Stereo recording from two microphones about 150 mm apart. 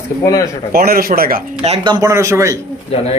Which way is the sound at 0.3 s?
20° left (ahead or behind).